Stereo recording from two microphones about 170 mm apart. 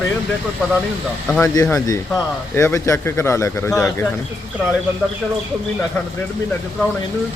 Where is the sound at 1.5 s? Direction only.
20° left (ahead or behind).